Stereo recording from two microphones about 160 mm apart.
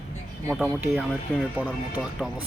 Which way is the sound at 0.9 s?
5° right (ahead or behind).